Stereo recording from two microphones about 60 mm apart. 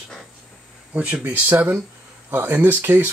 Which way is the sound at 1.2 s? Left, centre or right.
Right.